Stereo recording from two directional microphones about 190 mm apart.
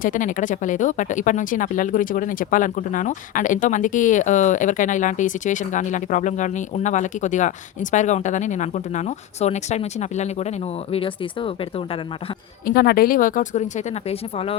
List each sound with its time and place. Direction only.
0.0 s speech: 45° left (ahead or behind)
12.6 s speech: 55° left (ahead or behind); by 14.6 s 30° left (ahead or behind)